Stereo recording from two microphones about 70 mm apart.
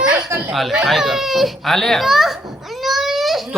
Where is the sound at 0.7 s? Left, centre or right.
Centre.